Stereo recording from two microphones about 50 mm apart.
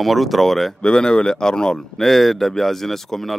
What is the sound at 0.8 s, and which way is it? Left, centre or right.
Speech, centre.